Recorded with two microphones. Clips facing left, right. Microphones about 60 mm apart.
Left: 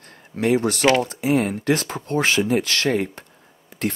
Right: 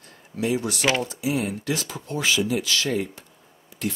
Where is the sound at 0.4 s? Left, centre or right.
Left.